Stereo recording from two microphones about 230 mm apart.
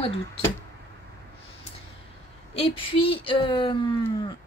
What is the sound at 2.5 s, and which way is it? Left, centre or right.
A woman's voice, left.